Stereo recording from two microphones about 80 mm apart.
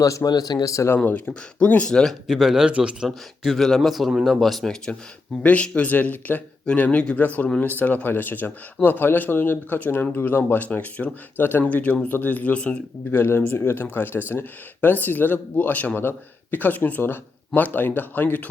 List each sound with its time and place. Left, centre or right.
0.0 s speech: left
0.9 s speech: left
2.2 s a man's voice: centre
3.1 s speech: centre
13.1 s speech: left